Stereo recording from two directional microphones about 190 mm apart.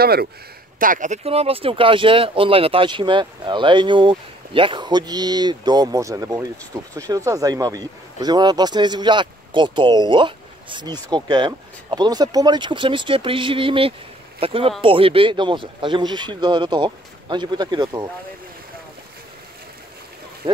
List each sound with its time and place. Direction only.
0.0 s speech: 55° right (ahead or behind)
0.7 s speech: 45° right (ahead or behind); by 18.0 s 20° right (ahead or behind)
20.4 s speech: 30° right (ahead or behind)